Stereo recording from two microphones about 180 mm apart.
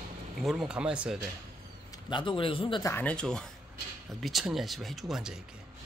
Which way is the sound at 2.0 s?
25° left (ahead or behind).